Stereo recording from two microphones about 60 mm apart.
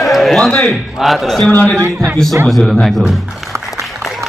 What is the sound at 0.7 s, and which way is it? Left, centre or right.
A man's voice, centre.